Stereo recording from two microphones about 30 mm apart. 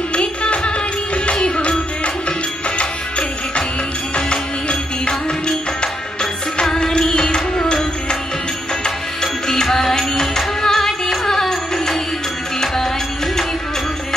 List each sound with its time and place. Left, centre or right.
0.1 s music: left
2.8 s music: left
6.6 s music: centre